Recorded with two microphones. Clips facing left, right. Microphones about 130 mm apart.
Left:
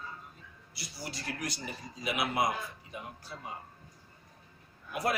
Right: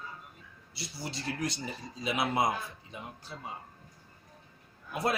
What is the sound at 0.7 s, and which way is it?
Speech, 25° right (ahead or behind).